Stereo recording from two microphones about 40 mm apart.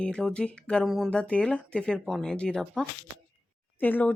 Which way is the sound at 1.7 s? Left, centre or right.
Centre.